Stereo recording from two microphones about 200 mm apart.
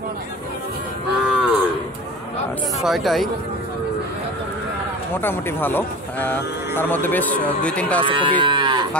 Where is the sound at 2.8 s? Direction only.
Centre (ahead or behind).